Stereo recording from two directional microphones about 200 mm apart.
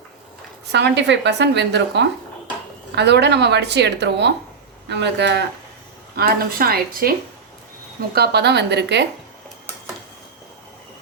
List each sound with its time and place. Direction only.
0.7 s speech: 60° right (ahead or behind)
6.1 s a woman's voice: 50° right (ahead or behind)